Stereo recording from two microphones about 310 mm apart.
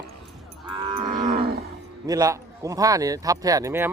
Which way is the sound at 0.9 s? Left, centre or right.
Right.